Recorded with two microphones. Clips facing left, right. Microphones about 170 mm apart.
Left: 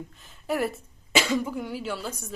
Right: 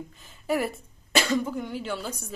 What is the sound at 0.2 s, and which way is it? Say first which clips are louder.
Speech: even; centre (ahead or behind).